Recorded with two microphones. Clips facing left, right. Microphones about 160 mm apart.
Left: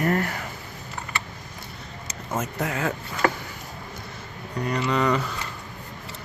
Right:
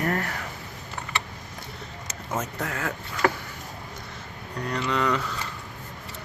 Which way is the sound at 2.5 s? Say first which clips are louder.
Left 4 dB; 20° left (ahead or behind).